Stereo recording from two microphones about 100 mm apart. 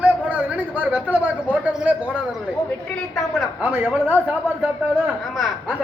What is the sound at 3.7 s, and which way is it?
Speech, 20° right (ahead or behind).